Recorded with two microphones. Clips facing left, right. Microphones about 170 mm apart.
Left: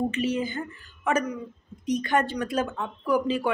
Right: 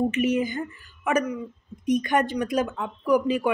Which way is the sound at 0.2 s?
15° right (ahead or behind).